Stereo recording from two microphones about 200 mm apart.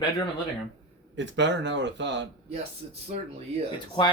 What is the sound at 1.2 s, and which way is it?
Speech, 60° right (ahead or behind).